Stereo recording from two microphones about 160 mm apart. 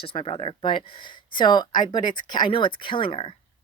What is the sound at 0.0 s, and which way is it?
Speech, 35° left (ahead or behind).